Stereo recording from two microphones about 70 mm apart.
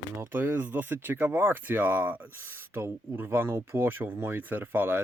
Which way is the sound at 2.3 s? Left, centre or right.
Right.